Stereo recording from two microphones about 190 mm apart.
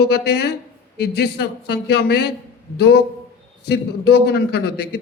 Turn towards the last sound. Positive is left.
turn(degrees=60)  # may be behind; listen again after turning